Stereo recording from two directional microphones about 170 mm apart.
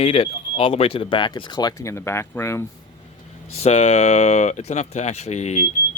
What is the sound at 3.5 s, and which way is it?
Speech, 40° left (ahead or behind).